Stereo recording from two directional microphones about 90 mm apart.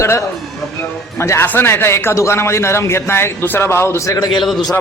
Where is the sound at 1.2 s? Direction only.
30° left (ahead or behind).